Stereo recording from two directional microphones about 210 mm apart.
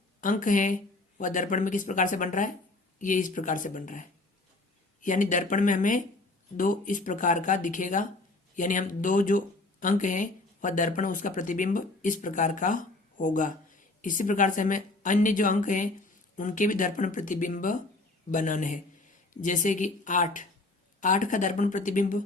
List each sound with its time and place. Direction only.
0.2 s speech: 40° left (ahead or behind)